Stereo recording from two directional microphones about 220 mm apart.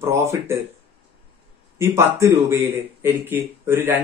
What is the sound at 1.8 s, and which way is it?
A man's voice, 10° right (ahead or behind).